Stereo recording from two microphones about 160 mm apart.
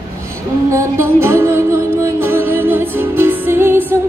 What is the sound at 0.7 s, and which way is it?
Music, 15° right (ahead or behind).